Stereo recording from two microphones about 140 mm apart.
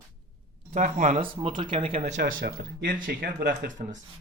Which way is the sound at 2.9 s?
85° right.